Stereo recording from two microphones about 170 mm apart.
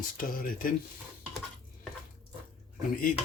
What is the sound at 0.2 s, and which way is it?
Speech, 55° left (ahead or behind).